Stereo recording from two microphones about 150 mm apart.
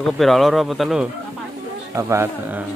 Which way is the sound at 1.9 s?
15° right (ahead or behind).